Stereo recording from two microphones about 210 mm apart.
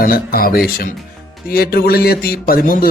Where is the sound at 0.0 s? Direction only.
45° left (ahead or behind).